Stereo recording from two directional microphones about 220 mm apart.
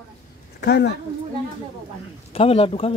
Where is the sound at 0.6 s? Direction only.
50° left (ahead or behind).